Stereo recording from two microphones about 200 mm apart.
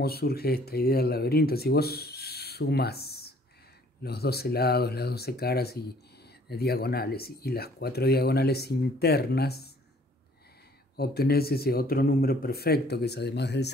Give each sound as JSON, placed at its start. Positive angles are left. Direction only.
{"t": 0.0, "sound": "speech", "side_deg": 50}
{"t": 11.0, "sound": "speech", "side_deg": 50}